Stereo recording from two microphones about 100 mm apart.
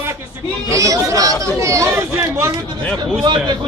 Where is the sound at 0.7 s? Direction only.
35° right (ahead or behind).